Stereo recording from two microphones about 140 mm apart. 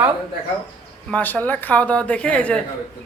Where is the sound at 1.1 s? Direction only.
10° left (ahead or behind).